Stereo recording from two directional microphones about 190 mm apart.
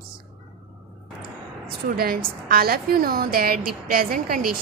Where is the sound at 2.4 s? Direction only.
55° right (ahead or behind).